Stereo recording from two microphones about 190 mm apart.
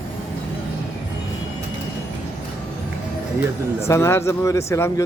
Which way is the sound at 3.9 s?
15° left (ahead or behind).